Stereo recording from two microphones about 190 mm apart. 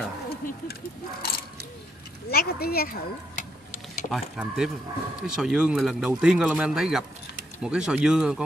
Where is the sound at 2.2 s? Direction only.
55° left (ahead or behind).